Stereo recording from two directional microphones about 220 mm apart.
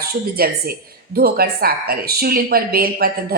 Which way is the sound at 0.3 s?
45° right (ahead or behind).